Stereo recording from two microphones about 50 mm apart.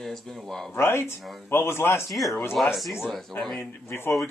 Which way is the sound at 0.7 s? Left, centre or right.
Left.